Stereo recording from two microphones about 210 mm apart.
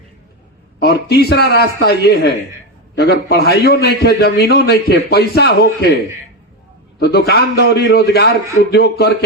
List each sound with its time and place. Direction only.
0.8 s a man's voice: 50° left (ahead or behind)
7.0 s a man's voice: 50° left (ahead or behind)